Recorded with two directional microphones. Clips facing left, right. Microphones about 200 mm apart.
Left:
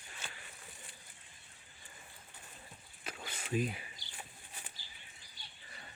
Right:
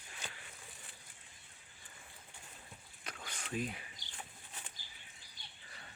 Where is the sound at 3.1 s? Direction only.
5° left (ahead or behind).